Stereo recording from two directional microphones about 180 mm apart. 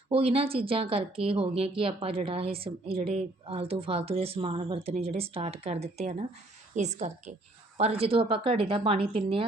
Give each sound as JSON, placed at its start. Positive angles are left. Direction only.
{"t": 0.1, "sound": "speech", "side_deg": -30}